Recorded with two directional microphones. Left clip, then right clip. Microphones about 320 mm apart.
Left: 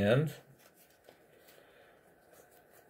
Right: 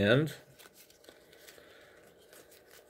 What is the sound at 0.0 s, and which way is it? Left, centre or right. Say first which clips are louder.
Speech: right 2 dB; right.